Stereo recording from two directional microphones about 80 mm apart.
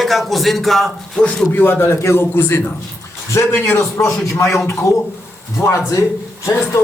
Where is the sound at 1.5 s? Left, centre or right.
Left.